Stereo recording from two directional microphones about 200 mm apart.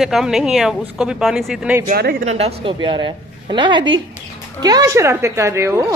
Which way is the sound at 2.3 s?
30° right (ahead or behind).